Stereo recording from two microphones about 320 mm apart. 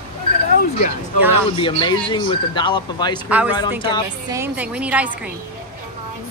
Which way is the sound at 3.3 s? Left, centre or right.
Centre.